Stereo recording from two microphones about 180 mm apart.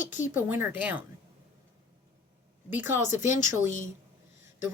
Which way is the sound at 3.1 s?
45° left (ahead or behind).